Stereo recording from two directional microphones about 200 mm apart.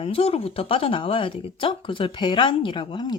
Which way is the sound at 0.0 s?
30° left (ahead or behind).